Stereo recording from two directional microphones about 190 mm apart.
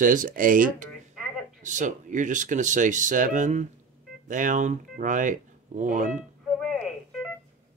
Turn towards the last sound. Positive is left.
turn(degrees=0)  # may be behind; listen again after turning